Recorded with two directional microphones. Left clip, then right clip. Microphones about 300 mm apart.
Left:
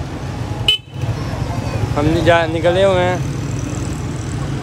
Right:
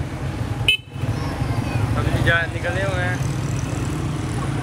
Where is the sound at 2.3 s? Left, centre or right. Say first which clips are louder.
Left 7 dB; centre.